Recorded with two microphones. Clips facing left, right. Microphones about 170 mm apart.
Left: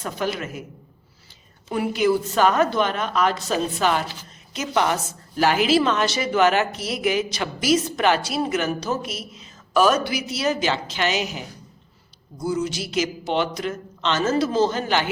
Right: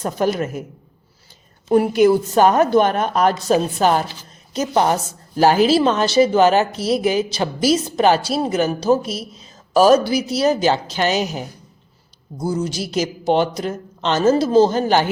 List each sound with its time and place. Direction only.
0.0 s speech: 45° right (ahead or behind)
1.7 s a woman's voice: 45° right (ahead or behind)